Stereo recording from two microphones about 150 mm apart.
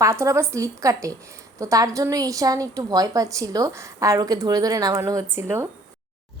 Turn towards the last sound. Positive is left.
turn(degrees=-15)  # may be behind; listen again after turning